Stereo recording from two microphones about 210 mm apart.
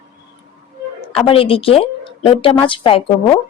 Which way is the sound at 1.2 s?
25° left (ahead or behind).